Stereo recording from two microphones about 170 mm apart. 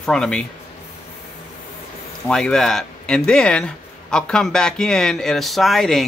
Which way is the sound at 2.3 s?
5° left (ahead or behind).